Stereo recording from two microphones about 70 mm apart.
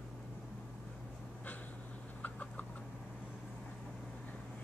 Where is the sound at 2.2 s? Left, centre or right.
Left.